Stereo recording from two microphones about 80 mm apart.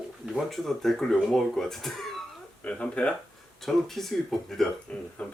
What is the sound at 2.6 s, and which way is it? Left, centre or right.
Speech, centre.